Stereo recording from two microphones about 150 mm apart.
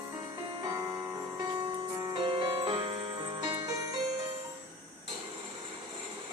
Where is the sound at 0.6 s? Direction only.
20° right (ahead or behind).